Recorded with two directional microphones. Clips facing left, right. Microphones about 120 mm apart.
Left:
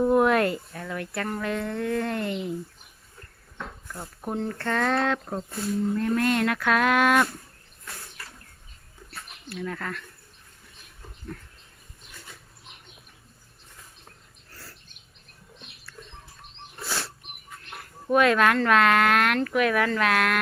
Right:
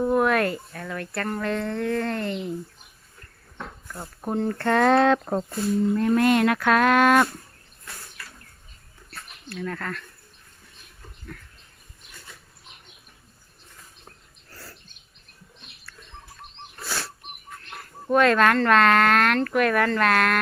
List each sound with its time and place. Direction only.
0.1 s a sound: 20° left (ahead or behind)
0.8 s speech: 10° left (ahead or behind)
3.9 s speech: 10° right (ahead or behind)
4.6 s speech: 65° right (ahead or behind)
5.3 s speech: 65° right (ahead or behind)
6.0 s speech: 10° right (ahead or behind)
9.1 s speech: 10° left (ahead or behind)
16.8 s a sound: 20° left (ahead or behind)
17.7 s speech: 10° left (ahead or behind)